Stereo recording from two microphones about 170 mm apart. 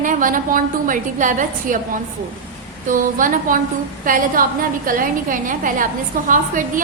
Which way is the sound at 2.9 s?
50° right (ahead or behind).